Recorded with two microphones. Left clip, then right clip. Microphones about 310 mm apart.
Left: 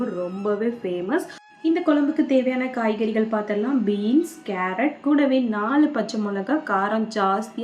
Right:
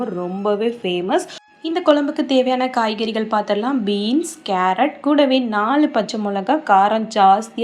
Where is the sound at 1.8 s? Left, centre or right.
Right.